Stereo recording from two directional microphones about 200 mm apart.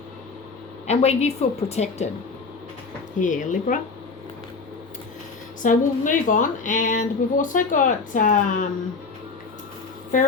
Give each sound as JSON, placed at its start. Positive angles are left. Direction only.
{"t": 0.9, "sound": "a woman's voice", "side_deg": 30}
{"t": 3.2, "sound": "a woman's voice", "side_deg": 40}
{"t": 5.6, "sound": "a woman's voice", "side_deg": 40}